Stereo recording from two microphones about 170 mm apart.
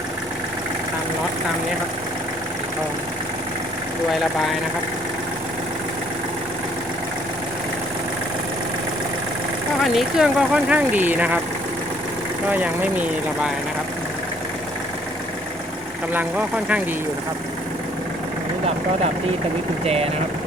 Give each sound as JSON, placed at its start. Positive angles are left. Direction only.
{"t": 9.8, "sound": "speech", "side_deg": 0}
{"t": 12.5, "sound": "speech", "side_deg": -10}
{"t": 19.8, "sound": "speech", "side_deg": -40}